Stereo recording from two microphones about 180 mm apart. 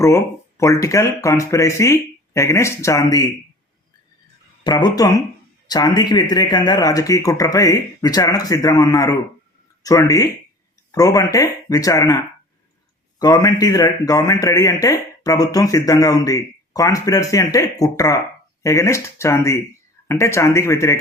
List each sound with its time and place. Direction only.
0.0 s speech: 15° left (ahead or behind)
4.6 s speech: 20° left (ahead or behind)
13.1 s speech: 20° left (ahead or behind)